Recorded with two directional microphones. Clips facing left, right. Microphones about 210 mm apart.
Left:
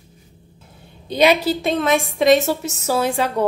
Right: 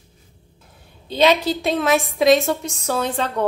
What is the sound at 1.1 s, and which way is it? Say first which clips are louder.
A woman's voice: left 1 dB; 10° left (ahead or behind).